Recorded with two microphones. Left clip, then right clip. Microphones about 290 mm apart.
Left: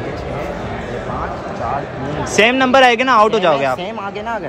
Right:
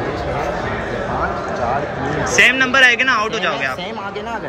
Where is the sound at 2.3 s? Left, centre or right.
Centre.